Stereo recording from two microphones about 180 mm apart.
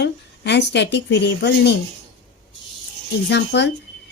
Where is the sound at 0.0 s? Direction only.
70° left (ahead or behind).